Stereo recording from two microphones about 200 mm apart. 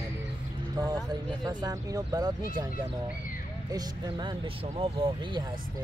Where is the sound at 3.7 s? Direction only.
20° right (ahead or behind).